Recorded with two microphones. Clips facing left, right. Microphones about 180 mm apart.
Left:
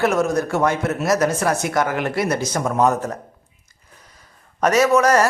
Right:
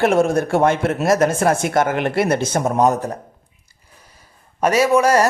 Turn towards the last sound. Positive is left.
turn(degrees=-10)  # may be behind; listen again after turning